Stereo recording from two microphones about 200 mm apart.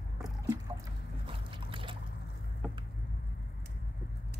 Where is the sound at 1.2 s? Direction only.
25° right (ahead or behind).